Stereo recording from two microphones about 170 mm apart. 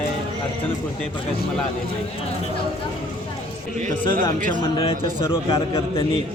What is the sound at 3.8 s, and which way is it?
Speech, 50° right (ahead or behind).